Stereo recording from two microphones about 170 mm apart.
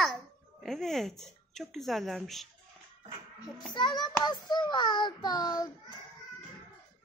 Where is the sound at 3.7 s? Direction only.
25° left (ahead or behind).